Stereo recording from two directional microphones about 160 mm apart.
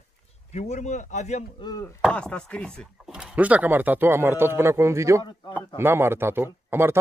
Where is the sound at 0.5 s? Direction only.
45° left (ahead or behind).